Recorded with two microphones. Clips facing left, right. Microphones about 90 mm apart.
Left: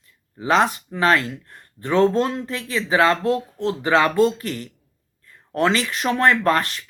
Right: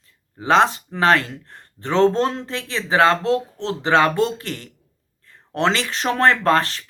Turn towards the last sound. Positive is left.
turn(degrees=-30)  # may be behind; listen again after turning